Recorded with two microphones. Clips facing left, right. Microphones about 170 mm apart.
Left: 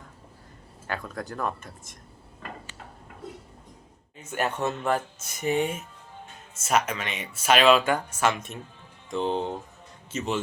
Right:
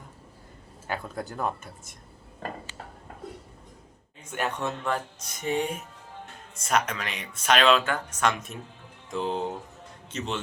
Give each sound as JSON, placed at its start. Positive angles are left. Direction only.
{"t": 0.9, "sound": "speech", "side_deg": -5}
{"t": 2.4, "sound": "a sound", "side_deg": -40}
{"t": 4.2, "sound": "a man's voice", "side_deg": 5}